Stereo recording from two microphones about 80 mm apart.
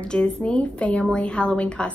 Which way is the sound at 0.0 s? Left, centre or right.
Centre.